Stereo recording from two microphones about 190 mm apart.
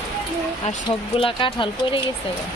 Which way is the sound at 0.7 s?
30° left (ahead or behind).